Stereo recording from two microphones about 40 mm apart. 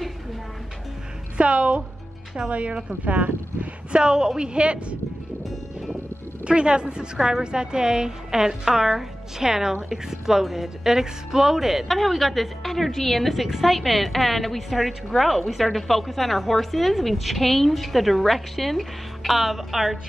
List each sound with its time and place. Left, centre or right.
1.4 s a woman's voice: right
3.9 s a woman's voice: centre
4.4 s speech: right
6.4 s speech: right
7.2 s a woman's voice: centre